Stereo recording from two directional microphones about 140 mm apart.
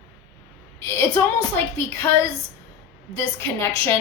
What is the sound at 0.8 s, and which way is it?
A woman's voice, 15° left (ahead or behind).